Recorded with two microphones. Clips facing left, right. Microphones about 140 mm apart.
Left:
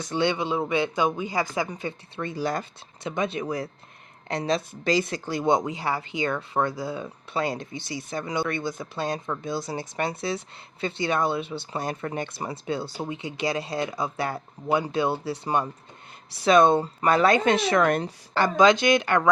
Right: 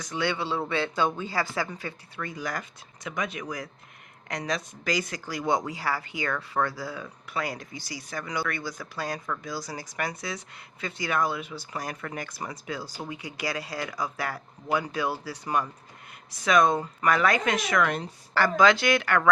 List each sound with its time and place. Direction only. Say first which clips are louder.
0.0 s speech: left 4 dB; 25° left (ahead or behind)